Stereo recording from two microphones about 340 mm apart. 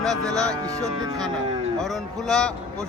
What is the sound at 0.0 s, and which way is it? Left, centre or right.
Speech, centre.